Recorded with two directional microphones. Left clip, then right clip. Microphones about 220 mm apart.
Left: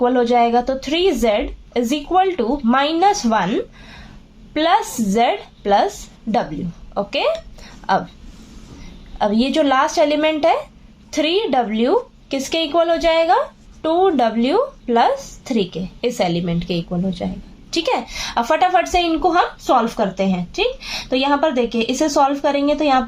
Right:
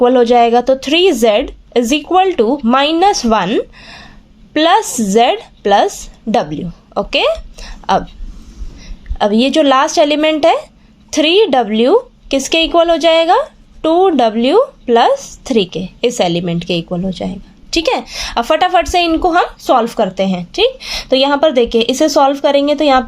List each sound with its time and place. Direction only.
0.0 s a woman's voice: 40° right (ahead or behind)
9.1 s a woman's voice: 40° right (ahead or behind)